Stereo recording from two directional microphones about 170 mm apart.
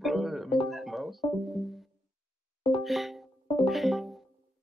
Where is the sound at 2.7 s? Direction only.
Centre (ahead or behind).